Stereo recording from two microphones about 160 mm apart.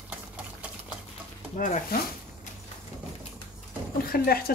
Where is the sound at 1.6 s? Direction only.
55° left (ahead or behind).